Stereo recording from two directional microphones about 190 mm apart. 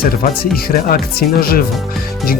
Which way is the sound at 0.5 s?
50° left (ahead or behind).